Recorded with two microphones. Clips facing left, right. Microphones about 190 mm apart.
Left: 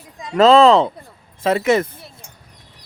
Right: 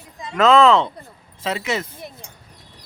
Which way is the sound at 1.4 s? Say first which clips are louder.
Left 8 dB; 50° left (ahead or behind).